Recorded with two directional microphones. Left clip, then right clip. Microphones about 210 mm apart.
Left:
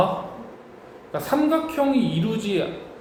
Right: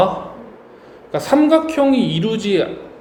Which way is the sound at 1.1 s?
40° right (ahead or behind).